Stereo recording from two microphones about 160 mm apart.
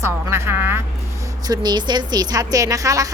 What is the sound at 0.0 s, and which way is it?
Speech, 15° right (ahead or behind).